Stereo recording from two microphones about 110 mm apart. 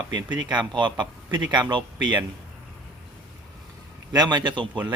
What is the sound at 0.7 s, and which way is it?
Speech, 45° right (ahead or behind).